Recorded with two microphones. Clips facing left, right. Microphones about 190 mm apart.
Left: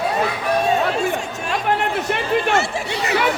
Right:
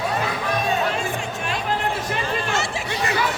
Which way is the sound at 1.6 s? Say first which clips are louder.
Left 5 dB; 60° left (ahead or behind).